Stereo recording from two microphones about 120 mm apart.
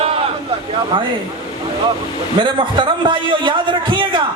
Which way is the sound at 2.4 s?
45° right (ahead or behind).